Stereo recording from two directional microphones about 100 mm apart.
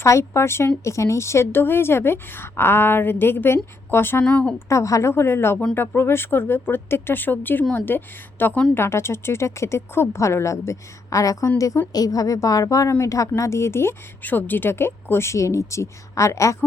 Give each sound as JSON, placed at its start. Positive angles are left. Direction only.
{"t": 0.0, "sound": "speech", "side_deg": 30}
{"t": 4.5, "sound": "a woman's voice", "side_deg": 30}